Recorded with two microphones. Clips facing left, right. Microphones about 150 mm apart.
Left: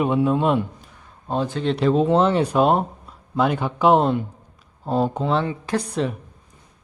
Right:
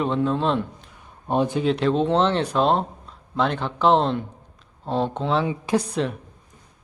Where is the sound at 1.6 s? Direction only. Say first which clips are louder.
Left 2 dB; centre (ahead or behind).